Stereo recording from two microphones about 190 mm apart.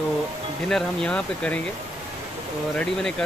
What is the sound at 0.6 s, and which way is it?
Speech, 5° left (ahead or behind).